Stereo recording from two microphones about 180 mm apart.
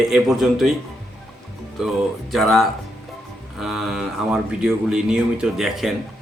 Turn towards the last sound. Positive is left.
turn(degrees=0)  # may be behind; listen again after turning